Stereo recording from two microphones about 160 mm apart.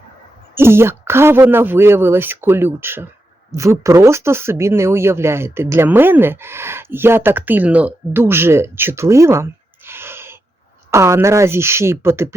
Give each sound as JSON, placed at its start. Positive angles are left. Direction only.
{"t": 0.5, "sound": "speech", "side_deg": -15}